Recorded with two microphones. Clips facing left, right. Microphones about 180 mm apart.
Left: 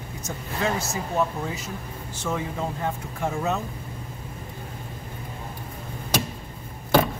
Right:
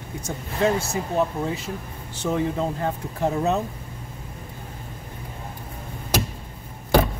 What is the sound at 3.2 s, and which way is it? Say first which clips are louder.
Speech: right 4 dB; 35° right (ahead or behind).